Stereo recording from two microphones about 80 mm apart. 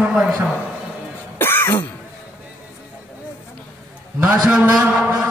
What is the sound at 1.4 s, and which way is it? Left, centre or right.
Throat clearing, left.